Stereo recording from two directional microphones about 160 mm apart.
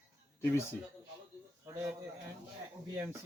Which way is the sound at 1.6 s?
15° right (ahead or behind).